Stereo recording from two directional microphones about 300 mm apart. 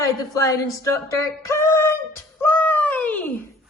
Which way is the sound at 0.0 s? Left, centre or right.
Centre.